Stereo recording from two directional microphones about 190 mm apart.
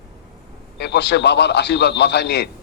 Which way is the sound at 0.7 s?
60° left (ahead or behind).